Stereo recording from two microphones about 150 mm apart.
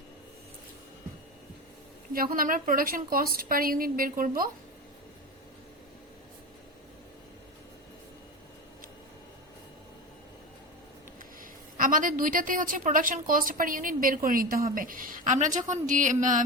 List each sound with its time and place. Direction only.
2.1 s a woman's voice: 75° right (ahead or behind)
11.8 s a woman's voice: 65° right (ahead or behind)